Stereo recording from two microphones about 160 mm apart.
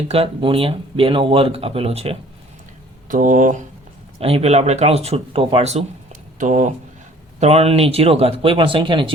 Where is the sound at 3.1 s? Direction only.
55° right (ahead or behind).